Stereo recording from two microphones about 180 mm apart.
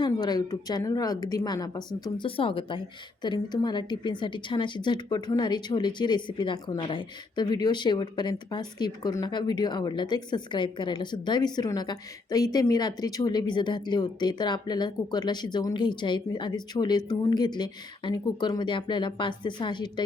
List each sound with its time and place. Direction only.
0.0 s a woman's voice: 20° left (ahead or behind)